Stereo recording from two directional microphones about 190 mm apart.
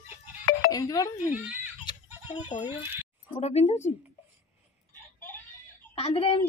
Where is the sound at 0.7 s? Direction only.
20° left (ahead or behind).